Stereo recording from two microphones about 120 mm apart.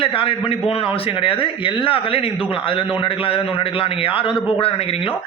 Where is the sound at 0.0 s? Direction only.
45° left (ahead or behind).